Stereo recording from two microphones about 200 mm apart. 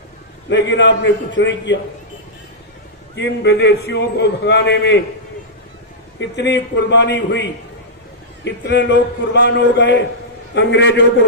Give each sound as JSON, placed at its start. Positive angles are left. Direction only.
{"t": 0.5, "sound": "a man's voice", "side_deg": 65}
{"t": 3.2, "sound": "a man's voice", "side_deg": 60}
{"t": 6.1, "sound": "a man's voice", "side_deg": 60}
{"t": 8.4, "sound": "a man's voice", "side_deg": 60}